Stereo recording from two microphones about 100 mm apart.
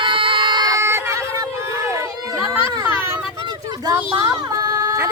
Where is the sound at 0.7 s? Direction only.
30° right (ahead or behind).